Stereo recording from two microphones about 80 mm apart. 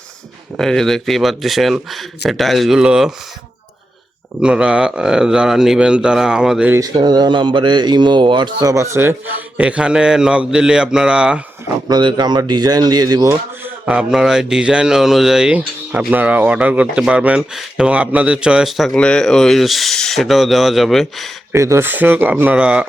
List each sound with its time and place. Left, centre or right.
0.6 s speech: centre
2.7 s speech: centre
4.4 s speech: centre
6.9 s speech: right
8.6 s a man's voice: right
9.6 s speech: centre
11.9 s speech: right
13.8 s speech: centre
17.5 s speech: centre
17.8 s speech: centre
18.9 s speech: centre
21.5 s a man's voice: right
21.8 s speech: right